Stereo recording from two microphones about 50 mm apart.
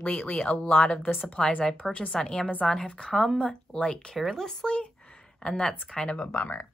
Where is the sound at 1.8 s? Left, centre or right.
Left.